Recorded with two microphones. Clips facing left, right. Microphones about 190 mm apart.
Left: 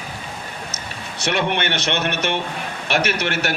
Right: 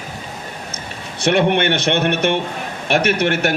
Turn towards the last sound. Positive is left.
turn(degrees=-50)  # may be behind; listen again after turning